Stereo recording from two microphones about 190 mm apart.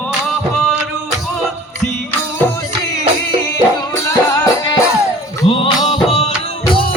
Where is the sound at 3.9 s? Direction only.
15° left (ahead or behind).